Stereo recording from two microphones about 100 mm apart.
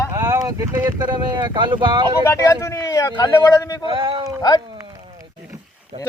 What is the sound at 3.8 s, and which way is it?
Speech, 55° right (ahead or behind).